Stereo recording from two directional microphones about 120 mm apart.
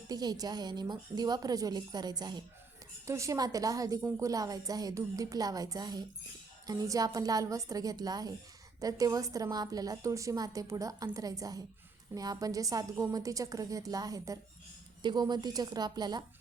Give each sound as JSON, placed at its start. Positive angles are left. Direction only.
{"t": 0.1, "sound": "a woman's voice", "side_deg": -35}